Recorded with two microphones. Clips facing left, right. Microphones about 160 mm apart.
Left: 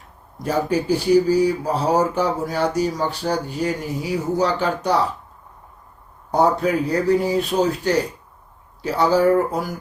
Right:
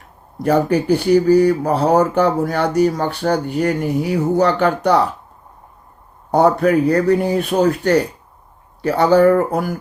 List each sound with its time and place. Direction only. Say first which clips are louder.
0.4 s speech: right 5 dB; 60° right (ahead or behind)
6.3 s speech: right 5 dB; 60° right (ahead or behind)